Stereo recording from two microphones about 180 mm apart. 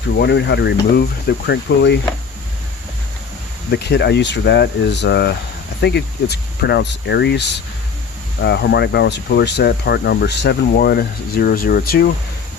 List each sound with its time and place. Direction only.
0.2 s speech: 75° left (ahead or behind)
3.7 s speech: 70° left (ahead or behind)